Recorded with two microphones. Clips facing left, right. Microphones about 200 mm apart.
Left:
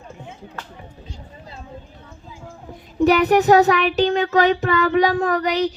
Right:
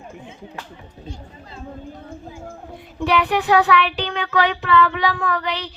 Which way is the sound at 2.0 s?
55° right (ahead or behind).